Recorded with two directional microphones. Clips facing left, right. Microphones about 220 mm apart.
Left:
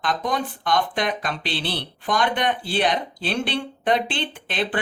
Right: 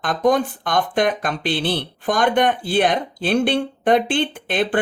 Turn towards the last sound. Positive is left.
turn(degrees=-50)  # may be behind; listen again after turning